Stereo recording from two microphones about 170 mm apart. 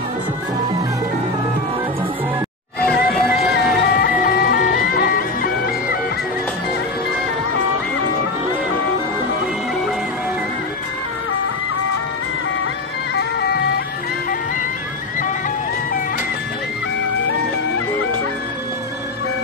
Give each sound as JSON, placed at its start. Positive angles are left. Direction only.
{"t": 2.8, "sound": "music", "side_deg": 5}
{"t": 3.3, "sound": "music", "side_deg": 65}
{"t": 13.1, "sound": "music", "side_deg": 75}